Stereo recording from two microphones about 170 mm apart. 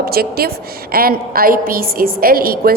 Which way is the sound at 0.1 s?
65° right (ahead or behind).